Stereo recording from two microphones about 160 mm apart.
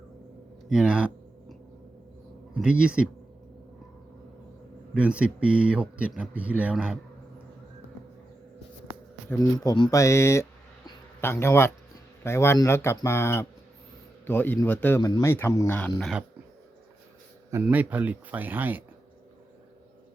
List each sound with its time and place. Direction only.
0.7 s a sound: 5° right (ahead or behind)
2.5 s speech: 5° right (ahead or behind)
4.9 s speech: 10° right (ahead or behind)
9.3 s speech: 20° left (ahead or behind); by 16.1 s 5° left (ahead or behind)
17.5 s speech: 10° right (ahead or behind)